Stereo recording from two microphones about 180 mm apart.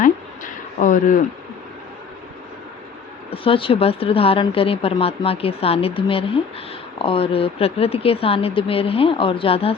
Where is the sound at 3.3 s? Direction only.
30° left (ahead or behind).